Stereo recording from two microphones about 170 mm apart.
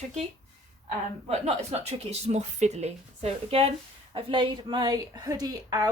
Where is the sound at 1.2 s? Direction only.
40° right (ahead or behind).